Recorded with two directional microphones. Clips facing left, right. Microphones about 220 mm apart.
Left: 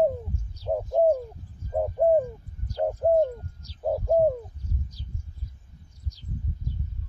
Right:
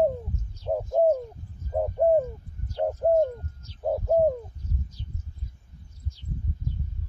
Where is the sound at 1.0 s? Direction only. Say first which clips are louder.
Even; 10° left (ahead or behind).